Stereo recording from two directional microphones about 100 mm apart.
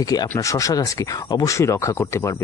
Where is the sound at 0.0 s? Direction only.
40° left (ahead or behind).